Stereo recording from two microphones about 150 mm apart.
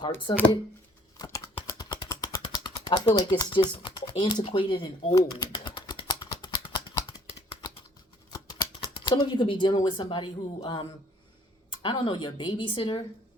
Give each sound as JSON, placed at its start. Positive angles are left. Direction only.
{"t": 0.3, "sound": "speech", "side_deg": 25}
{"t": 1.8, "sound": "a sound", "side_deg": 30}
{"t": 9.0, "sound": "speech", "side_deg": 30}